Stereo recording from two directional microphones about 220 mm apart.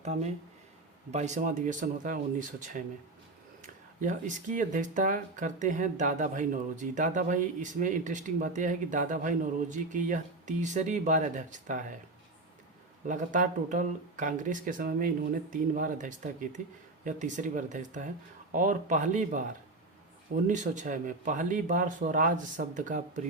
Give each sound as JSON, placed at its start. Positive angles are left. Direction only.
{"t": 0.0, "sound": "speech", "side_deg": -30}
{"t": 3.6, "sound": "speech", "side_deg": -35}
{"t": 13.1, "sound": "speech", "side_deg": -35}
{"t": 20.5, "sound": "speech", "side_deg": -35}